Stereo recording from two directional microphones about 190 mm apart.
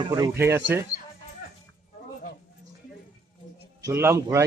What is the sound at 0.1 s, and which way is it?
Speech, 15° right (ahead or behind).